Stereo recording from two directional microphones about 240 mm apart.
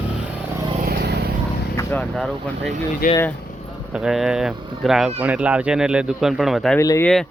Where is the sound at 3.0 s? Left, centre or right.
Left.